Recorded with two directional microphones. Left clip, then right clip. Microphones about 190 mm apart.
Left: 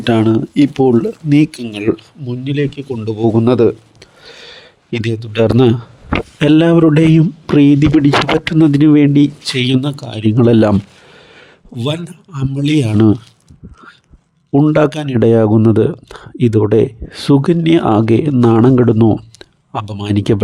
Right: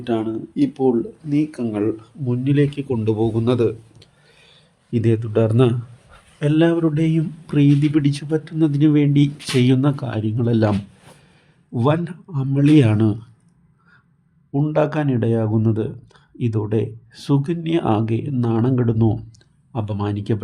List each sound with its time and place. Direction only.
0.0 s speech: 55° left (ahead or behind)
2.4 s speech: 40° left (ahead or behind)
3.0 s a sound: 40° left (ahead or behind)
5.3 s speech: 45° left (ahead or behind)
11.3 s a sound: 45° left (ahead or behind)
12.3 s speech: 50° left (ahead or behind)
14.5 s speech: 40° left (ahead or behind)